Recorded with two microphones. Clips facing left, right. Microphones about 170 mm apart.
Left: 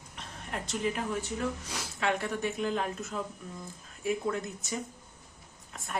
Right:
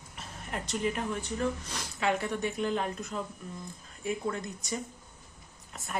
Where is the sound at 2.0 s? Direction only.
Centre (ahead or behind).